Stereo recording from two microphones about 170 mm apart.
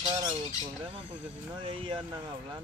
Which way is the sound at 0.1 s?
25° right (ahead or behind).